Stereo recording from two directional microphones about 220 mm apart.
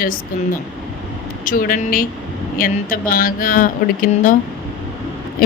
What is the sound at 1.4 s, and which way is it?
Speech, 40° left (ahead or behind).